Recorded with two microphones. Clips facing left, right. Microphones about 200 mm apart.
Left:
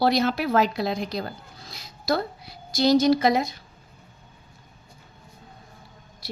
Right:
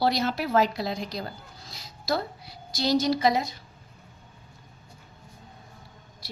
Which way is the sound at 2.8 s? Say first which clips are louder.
Left 5 dB; 55° left (ahead or behind).